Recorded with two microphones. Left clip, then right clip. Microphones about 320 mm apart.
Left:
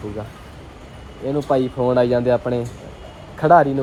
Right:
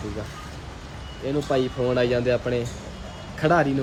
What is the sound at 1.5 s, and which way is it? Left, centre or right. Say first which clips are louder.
Speech: left 6 dB; centre.